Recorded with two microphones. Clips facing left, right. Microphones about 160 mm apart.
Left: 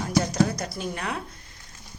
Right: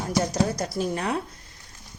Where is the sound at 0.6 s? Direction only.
30° right (ahead or behind).